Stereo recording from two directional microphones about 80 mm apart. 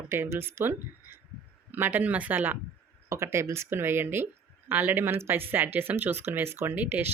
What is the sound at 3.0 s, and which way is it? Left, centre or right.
Speech, right.